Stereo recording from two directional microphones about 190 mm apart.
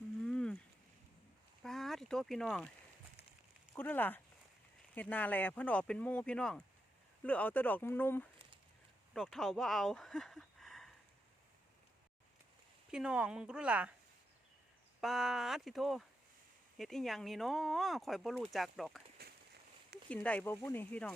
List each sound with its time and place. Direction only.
0.2 s a sound: 5° left (ahead or behind)
1.6 s a sound: centre (ahead or behind)
3.8 s speech: 10° left (ahead or behind)
12.9 s speech: 5° right (ahead or behind)
15.0 s speech: centre (ahead or behind)
20.1 s speech: 5° left (ahead or behind)